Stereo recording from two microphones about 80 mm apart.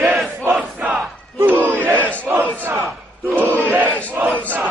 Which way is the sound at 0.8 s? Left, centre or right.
Right.